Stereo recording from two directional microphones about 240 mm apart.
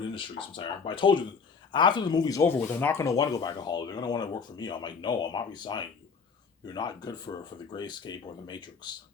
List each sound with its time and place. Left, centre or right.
0.0 s speech: left